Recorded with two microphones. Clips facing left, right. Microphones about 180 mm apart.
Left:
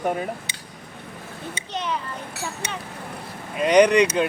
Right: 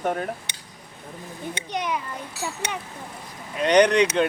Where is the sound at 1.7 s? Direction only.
10° right (ahead or behind).